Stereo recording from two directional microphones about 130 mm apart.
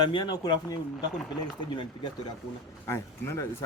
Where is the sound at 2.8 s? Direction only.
20° left (ahead or behind).